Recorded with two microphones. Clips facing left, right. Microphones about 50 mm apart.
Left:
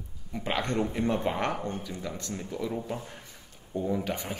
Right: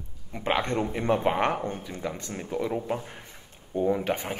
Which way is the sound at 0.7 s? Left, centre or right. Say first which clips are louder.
Even; centre.